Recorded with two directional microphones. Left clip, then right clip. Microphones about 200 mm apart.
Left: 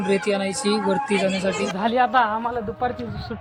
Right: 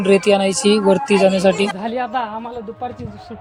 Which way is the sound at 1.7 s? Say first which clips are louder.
Left 3 dB; 5° left (ahead or behind).